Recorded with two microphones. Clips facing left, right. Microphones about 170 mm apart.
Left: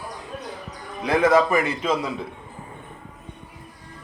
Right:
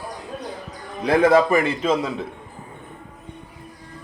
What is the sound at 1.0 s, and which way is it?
Speech, 30° right (ahead or behind).